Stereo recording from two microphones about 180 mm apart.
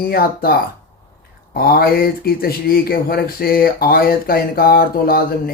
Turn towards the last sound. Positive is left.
turn(degrees=55)  # may be behind; listen again after turning